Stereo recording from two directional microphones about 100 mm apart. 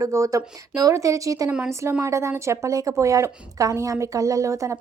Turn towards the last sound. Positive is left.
turn(degrees=-30)  # may be behind; listen again after turning